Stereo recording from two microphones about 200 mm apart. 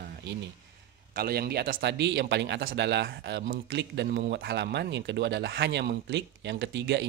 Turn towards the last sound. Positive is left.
turn(degrees=-60)  # may be behind; listen again after turning